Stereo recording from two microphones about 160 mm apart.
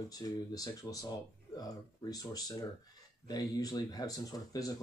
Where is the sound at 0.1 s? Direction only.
25° left (ahead or behind).